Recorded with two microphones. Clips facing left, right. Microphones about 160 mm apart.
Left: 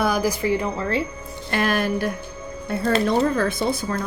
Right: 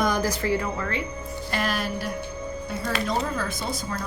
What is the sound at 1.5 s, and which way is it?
A woman's voice, 55° left (ahead or behind).